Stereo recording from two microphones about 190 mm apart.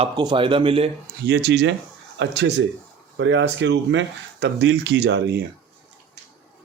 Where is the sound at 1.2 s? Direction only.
65° right (ahead or behind).